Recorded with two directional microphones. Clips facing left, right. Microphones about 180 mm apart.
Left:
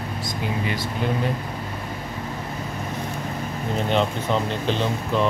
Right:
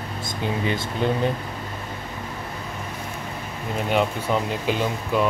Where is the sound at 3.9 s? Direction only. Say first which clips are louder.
Right 1 dB; 10° right (ahead or behind).